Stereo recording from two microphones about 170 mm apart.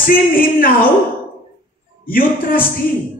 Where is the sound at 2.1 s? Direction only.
55° left (ahead or behind).